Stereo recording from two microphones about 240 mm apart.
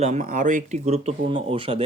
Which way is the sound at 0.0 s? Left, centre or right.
Right.